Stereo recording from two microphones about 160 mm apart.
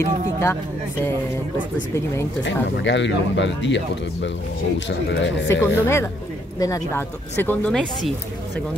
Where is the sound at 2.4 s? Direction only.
90° left.